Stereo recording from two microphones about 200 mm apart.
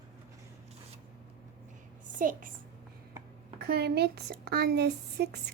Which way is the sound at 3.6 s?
55° right (ahead or behind).